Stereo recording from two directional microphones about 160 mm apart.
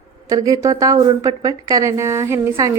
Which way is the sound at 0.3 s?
20° right (ahead or behind).